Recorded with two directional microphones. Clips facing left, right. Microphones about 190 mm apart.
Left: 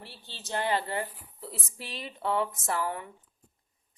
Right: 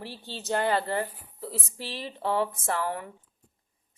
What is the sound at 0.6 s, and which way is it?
Speech, 40° right (ahead or behind).